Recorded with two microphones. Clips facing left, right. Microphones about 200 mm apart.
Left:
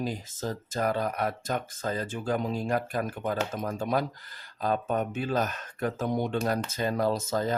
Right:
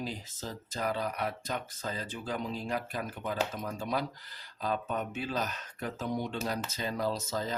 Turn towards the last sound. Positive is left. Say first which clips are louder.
# left 6 dB
turn(degrees=50)  # may be behind; listen again after turning